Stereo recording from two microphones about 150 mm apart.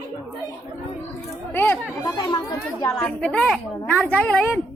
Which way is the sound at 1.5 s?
15° left (ahead or behind).